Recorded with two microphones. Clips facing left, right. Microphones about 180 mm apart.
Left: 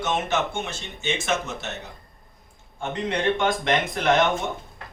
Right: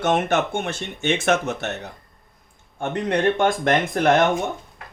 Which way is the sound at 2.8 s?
55° right (ahead or behind).